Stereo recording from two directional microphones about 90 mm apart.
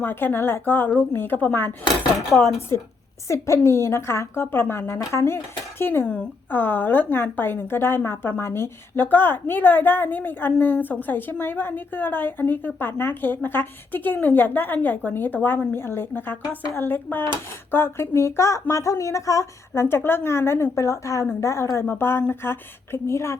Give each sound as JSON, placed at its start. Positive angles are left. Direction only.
{"t": 0.0, "sound": "speech", "side_deg": 20}
{"t": 2.6, "sound": "a woman's voice", "side_deg": 30}